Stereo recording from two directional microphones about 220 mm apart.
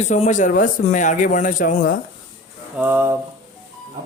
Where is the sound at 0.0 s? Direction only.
30° left (ahead or behind).